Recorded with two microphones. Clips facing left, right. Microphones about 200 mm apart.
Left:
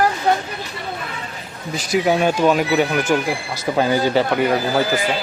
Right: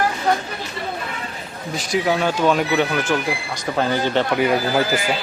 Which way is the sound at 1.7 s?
Centre (ahead or behind).